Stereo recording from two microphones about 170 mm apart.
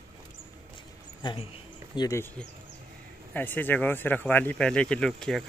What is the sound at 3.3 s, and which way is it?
Speech, 10° left (ahead or behind).